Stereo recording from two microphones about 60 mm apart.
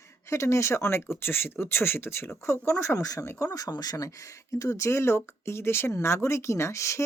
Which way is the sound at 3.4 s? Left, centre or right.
Left.